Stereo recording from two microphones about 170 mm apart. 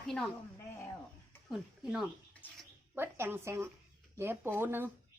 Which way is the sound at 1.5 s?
Centre (ahead or behind).